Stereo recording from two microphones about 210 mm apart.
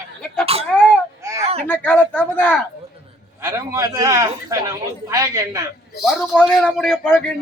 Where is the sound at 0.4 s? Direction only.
30° right (ahead or behind).